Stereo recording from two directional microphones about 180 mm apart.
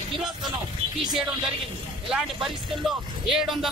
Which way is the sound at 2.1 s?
Centre (ahead or behind).